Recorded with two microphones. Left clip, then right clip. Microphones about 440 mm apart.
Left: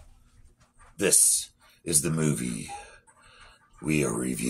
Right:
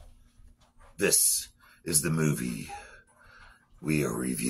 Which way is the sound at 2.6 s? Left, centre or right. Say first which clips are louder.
Left 2 dB; right.